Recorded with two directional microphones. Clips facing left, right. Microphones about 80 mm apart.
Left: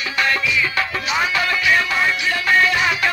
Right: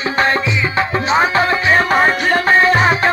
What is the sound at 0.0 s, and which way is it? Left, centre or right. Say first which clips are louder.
Music: right 5 dB; right.